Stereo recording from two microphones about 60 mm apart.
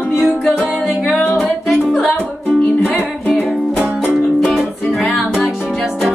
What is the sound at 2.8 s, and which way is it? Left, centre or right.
Music, left.